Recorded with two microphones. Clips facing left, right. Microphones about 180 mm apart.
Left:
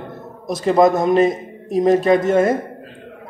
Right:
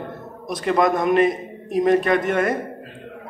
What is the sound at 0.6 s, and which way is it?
A man's voice, 25° left (ahead or behind).